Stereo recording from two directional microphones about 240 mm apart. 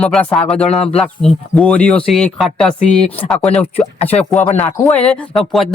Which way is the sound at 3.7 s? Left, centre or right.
Left.